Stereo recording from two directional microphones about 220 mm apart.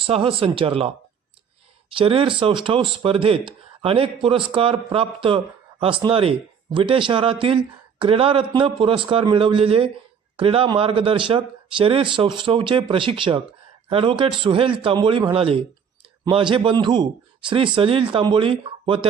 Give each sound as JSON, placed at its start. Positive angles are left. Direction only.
{"t": 0.0, "sound": "speech", "side_deg": -25}
{"t": 1.9, "sound": "speech", "side_deg": -25}